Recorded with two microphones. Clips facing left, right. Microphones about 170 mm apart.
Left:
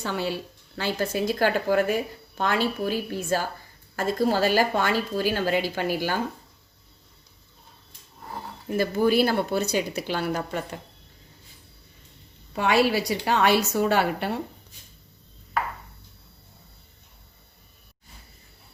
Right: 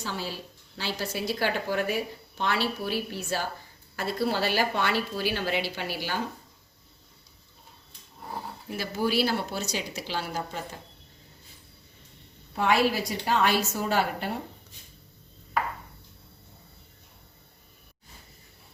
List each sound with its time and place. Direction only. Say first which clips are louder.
0.0 s a woman's voice: left 6 dB; 60° left (ahead or behind)
8.7 s a woman's voice: left 6 dB; 50° left (ahead or behind)
12.5 s a woman's voice: left 3 dB; 80° left